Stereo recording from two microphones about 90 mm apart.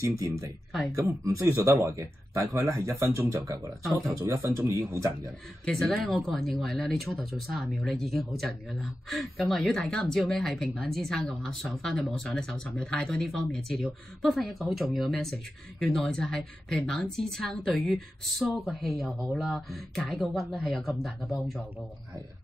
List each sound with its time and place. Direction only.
0.0 s speech: 35° right (ahead or behind)
5.7 s speech: 5° left (ahead or behind)